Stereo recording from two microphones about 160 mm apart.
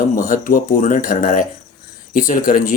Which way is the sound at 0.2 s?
60° left (ahead or behind).